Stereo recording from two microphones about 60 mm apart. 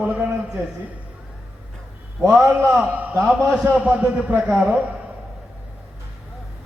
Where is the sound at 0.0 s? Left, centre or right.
Right.